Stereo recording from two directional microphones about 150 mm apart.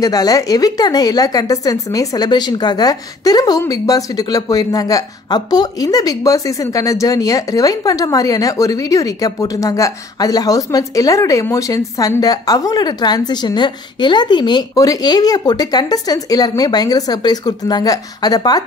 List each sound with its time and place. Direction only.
0.0 s a woman's voice: 25° left (ahead or behind)